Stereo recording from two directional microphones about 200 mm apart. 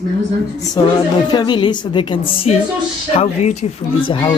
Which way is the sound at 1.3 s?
20° left (ahead or behind).